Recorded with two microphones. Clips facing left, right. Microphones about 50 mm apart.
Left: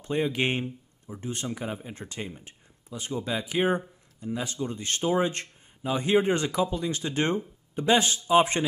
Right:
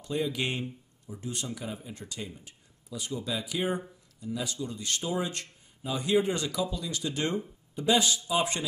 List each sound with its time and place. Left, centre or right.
0.0 s speech: left